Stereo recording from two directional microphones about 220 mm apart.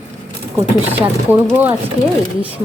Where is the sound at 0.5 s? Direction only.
10° right (ahead or behind).